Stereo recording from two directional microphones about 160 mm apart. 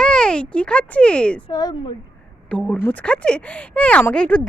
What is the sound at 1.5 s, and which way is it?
Speech, 25° left (ahead or behind).